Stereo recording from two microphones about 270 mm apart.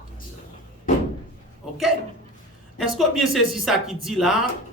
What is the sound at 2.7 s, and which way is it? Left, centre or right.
Speech, centre.